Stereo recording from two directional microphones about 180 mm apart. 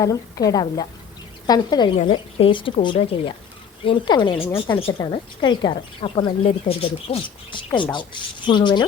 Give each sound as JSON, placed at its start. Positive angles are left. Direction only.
{"t": 0.0, "sound": "speech", "side_deg": 20}